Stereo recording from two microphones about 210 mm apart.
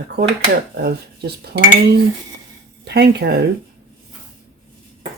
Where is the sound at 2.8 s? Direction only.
50° right (ahead or behind).